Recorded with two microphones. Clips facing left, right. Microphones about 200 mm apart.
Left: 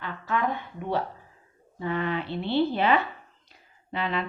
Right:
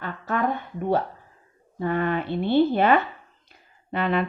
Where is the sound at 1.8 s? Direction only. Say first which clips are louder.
Right 4 dB; 50° right (ahead or behind).